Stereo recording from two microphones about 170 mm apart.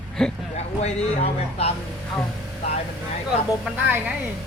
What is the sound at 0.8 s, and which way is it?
Speech, 35° left (ahead or behind).